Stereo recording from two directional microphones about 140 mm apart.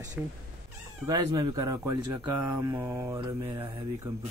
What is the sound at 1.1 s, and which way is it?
Speech, 30° right (ahead or behind).